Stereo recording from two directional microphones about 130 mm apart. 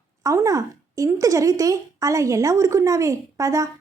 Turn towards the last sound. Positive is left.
turn(degrees=-25)  # may be behind; listen again after turning